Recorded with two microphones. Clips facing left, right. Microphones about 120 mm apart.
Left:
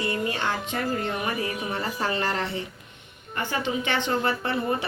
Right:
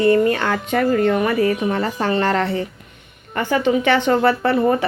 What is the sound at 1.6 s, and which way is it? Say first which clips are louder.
Speech: right 8 dB; 55° right (ahead or behind).